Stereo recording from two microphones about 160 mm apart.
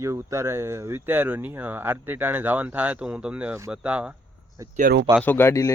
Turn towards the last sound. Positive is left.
turn(degrees=15)  # may be behind; listen again after turning